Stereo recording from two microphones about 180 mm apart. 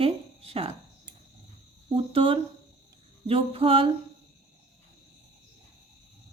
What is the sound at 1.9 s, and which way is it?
Speech, 30° right (ahead or behind).